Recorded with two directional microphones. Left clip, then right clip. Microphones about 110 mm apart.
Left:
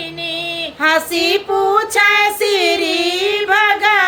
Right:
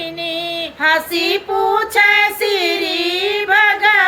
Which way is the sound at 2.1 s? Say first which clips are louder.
Left 1 dB; 40° left (ahead or behind).